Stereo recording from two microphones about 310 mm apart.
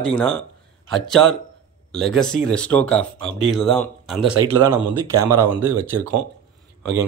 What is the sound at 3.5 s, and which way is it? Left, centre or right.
Speech, centre.